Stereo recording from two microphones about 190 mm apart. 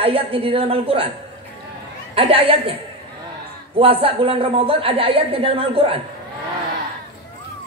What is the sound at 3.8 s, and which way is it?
A woman's voice, 30° right (ahead or behind).